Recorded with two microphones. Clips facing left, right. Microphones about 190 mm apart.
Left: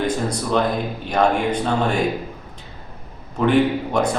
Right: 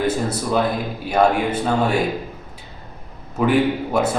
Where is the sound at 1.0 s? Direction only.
5° right (ahead or behind).